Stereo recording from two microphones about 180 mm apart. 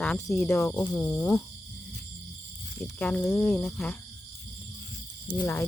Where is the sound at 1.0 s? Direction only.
10° left (ahead or behind).